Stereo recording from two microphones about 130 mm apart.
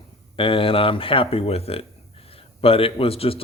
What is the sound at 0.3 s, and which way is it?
A man's voice, 40° left (ahead or behind).